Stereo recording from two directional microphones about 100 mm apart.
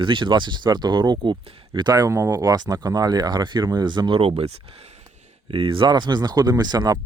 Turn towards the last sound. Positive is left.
turn(degrees=-45)  # may be behind; listen again after turning